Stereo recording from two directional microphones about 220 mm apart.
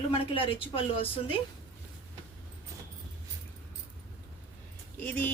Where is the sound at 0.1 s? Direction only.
25° left (ahead or behind).